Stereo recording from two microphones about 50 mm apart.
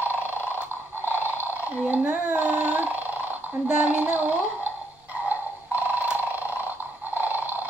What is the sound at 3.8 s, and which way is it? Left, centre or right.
Gargling, right.